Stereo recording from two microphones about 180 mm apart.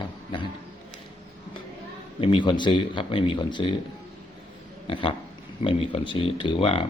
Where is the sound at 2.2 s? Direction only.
25° left (ahead or behind).